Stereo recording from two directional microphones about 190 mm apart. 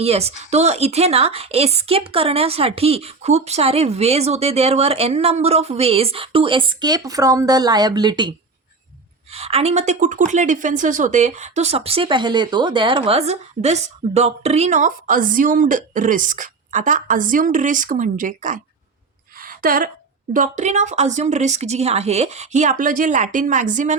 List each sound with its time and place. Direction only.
0.0 s a woman's voice: 35° right (ahead or behind)
19.4 s a sound: 50° right (ahead or behind)
20.3 s a woman's voice: 40° right (ahead or behind)